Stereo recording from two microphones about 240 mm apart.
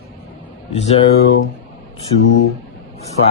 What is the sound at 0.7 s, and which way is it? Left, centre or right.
Speech, left.